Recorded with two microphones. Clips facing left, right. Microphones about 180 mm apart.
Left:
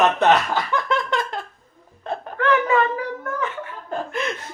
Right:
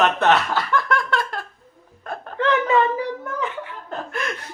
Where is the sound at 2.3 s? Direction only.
20° right (ahead or behind).